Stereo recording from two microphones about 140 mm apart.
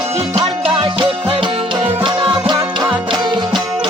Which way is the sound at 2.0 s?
35° right (ahead or behind).